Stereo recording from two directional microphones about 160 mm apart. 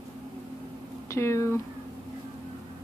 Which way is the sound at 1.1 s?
15° left (ahead or behind).